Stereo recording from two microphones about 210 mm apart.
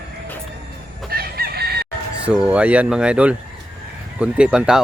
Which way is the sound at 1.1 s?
45° right (ahead or behind).